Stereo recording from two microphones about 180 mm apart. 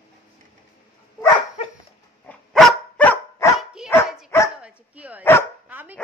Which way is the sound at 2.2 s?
Centre (ahead or behind).